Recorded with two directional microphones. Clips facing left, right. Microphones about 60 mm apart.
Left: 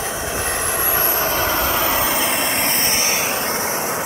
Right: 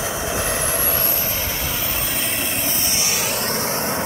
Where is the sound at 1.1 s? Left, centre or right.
Left.